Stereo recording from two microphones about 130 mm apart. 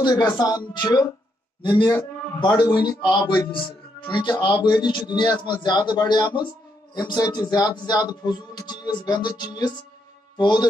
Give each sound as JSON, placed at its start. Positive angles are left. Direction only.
{"t": 0.0, "sound": "a man's voice", "side_deg": 35}